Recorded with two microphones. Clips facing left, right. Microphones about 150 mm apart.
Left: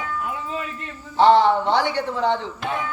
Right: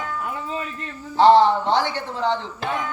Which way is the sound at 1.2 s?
15° left (ahead or behind).